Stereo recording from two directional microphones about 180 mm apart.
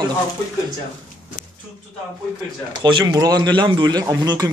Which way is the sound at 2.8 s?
25° right (ahead or behind).